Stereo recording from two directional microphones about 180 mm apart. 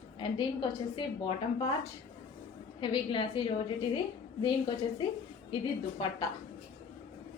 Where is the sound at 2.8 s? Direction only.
30° left (ahead or behind).